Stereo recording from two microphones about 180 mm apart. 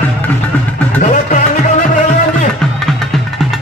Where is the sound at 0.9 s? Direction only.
40° left (ahead or behind).